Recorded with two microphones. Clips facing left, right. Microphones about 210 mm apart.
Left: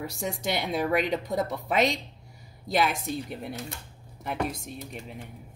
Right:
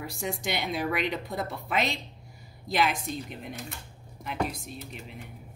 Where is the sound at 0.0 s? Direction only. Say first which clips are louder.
Left 2 dB; 40° left (ahead or behind).